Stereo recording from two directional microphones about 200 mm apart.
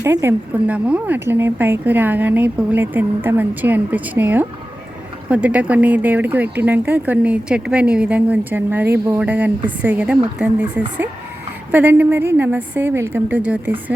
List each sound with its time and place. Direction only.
0.0 s speech: 10° right (ahead or behind)